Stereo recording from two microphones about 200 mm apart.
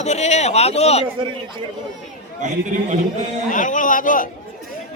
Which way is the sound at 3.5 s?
40° left (ahead or behind).